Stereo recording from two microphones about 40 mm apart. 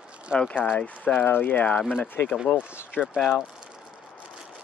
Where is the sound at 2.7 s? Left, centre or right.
Left.